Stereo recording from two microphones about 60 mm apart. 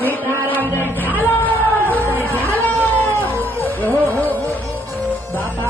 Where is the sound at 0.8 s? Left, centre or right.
Left.